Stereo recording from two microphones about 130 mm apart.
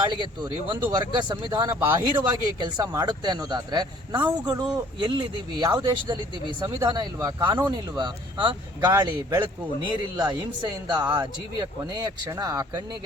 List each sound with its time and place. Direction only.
0.0 s speech: 35° right (ahead or behind)
10.8 s speech: 35° right (ahead or behind)